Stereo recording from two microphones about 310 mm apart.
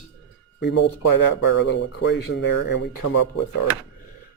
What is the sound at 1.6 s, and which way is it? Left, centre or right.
Speech, left.